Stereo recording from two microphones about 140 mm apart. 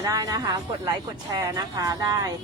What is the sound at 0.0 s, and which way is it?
Speech, 25° right (ahead or behind).